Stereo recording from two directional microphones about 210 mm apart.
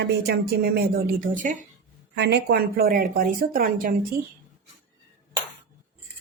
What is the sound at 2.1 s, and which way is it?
Speech, 55° right (ahead or behind).